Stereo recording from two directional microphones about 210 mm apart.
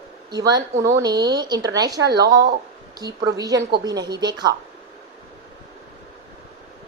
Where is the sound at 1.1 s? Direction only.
50° right (ahead or behind).